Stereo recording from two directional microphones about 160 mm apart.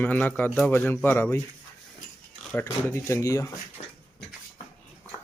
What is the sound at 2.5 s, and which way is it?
Speech, 15° left (ahead or behind).